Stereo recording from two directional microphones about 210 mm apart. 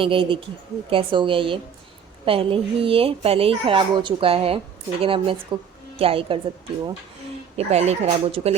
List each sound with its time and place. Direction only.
0.0 s speech: 25° right (ahead or behind)
7.5 s speech: 30° right (ahead or behind)